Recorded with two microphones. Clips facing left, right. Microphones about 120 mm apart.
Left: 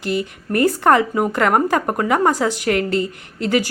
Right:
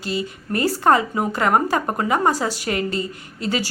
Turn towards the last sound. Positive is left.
turn(degrees=60)  # may be behind; listen again after turning